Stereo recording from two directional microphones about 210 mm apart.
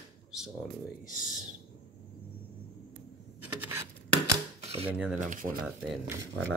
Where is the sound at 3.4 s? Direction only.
10° right (ahead or behind).